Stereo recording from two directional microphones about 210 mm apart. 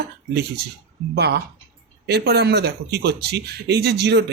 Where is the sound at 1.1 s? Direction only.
50° right (ahead or behind).